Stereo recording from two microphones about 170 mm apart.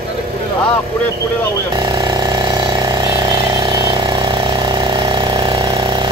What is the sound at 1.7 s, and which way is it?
Vehicle, 25° right (ahead or behind).